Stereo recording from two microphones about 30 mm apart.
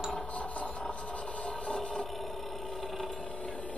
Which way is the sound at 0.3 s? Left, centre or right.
Left.